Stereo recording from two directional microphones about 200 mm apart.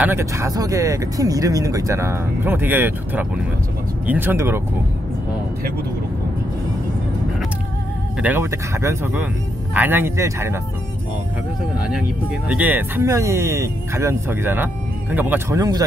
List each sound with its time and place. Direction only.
0.0 s speech: 10° right (ahead or behind)
8.2 s speech: 10° right (ahead or behind)
12.4 s speech: 10° right (ahead or behind)